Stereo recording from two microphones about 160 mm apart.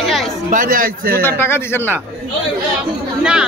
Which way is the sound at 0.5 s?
60° right (ahead or behind).